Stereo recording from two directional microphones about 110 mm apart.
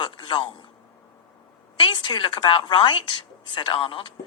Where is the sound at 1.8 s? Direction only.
50° left (ahead or behind).